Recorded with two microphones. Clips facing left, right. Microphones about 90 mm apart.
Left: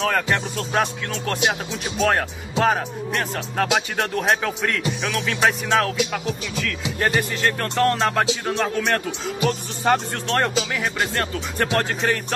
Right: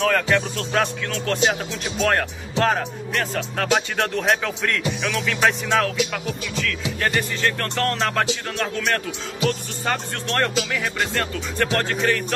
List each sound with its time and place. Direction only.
0.0 s speech: 10° left (ahead or behind)